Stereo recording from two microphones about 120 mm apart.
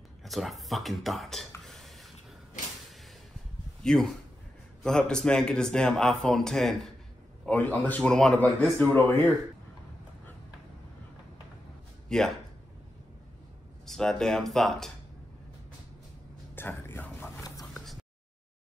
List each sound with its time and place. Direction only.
0.2 s a man's voice: centre (ahead or behind)
1.6 s a sound: centre (ahead or behind)
3.8 s a man's voice: 5° left (ahead or behind)
7.4 s a man's voice: 15° left (ahead or behind)
12.1 s speech: 5° left (ahead or behind)
13.8 s a man's voice: 5° left (ahead or behind)
16.5 s a sound: 20° left (ahead or behind)